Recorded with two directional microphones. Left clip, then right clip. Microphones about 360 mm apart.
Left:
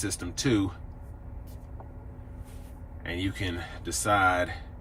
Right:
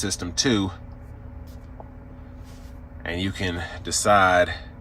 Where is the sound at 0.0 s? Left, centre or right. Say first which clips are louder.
Right 7 dB; centre.